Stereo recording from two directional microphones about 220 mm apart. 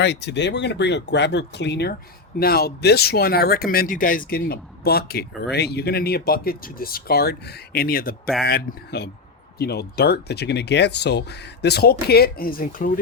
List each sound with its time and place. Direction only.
0.0 s speech: 50° left (ahead or behind)